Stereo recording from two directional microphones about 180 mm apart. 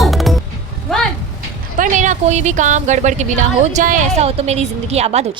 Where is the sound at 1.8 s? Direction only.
45° right (ahead or behind).